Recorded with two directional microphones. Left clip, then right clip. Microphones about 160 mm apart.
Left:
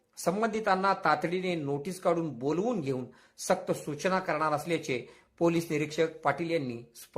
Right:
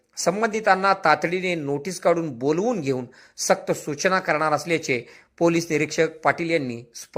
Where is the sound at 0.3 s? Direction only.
15° right (ahead or behind).